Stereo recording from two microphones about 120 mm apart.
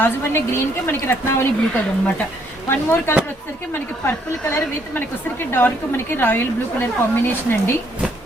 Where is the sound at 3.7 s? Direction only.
15° left (ahead or behind).